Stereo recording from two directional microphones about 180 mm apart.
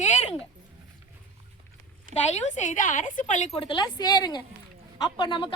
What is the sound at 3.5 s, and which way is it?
A woman's voice, 25° left (ahead or behind).